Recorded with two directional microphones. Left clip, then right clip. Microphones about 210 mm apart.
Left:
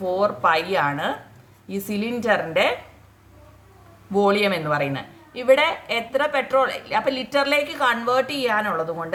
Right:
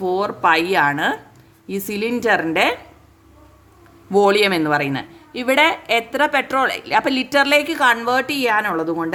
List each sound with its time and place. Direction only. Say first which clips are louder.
0.0 s a man's voice: right 2 dB; 50° right (ahead or behind)
4.1 s a man's voice: right 5 dB; 50° right (ahead or behind)